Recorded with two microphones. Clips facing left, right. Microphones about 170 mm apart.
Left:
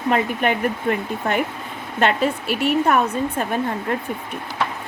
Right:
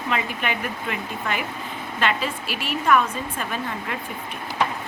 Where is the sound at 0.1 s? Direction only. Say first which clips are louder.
Left 7 dB; 50° left (ahead or behind).